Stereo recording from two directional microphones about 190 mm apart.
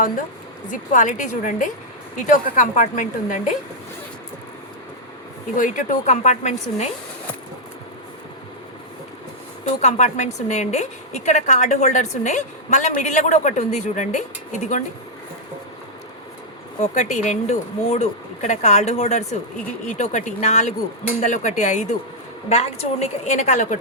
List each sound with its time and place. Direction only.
0.7 s a woman's voice: 40° left (ahead or behind)
5.5 s a woman's voice: 45° left (ahead or behind)
9.8 s a woman's voice: 40° left (ahead or behind)
16.8 s a woman's voice: 40° left (ahead or behind)